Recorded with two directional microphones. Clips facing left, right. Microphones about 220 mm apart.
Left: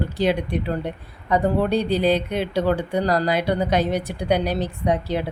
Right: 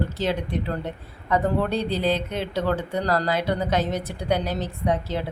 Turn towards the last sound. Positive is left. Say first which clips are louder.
# left 3 dB
turn(degrees=15)  # may be behind; listen again after turning